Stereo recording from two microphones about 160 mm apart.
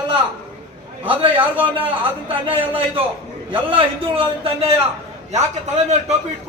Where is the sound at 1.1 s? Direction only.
30° right (ahead or behind).